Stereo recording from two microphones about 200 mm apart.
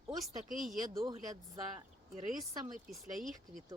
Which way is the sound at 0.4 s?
40° right (ahead or behind).